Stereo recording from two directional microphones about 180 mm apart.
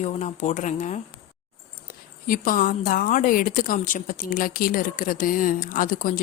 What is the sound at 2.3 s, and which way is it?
A woman's voice, 50° left (ahead or behind).